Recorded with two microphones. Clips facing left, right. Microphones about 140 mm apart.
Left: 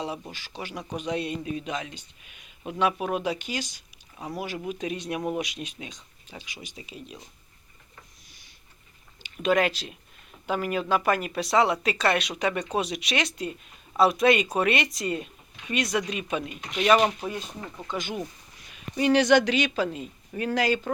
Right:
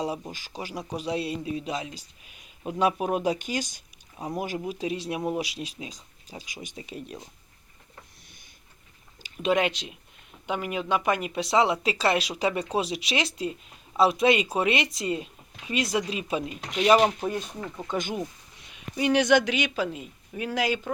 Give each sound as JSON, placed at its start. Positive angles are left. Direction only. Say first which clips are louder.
{"t": 0.3, "sound": "speech", "louder": "right 1 dB", "side_deg": -40}
{"t": 4.5, "sound": "speech", "louder": "right 1 dB", "side_deg": -30}
{"t": 6.4, "sound": "speech", "louder": "right 2 dB", "side_deg": -45}
{"t": 9.2, "sound": "speech", "louder": "left 1 dB", "side_deg": -25}
{"t": 16.7, "sound": "speech", "louder": "right 1 dB", "side_deg": -15}
{"t": 18.9, "sound": "speech", "louder": "left 1 dB", "side_deg": -10}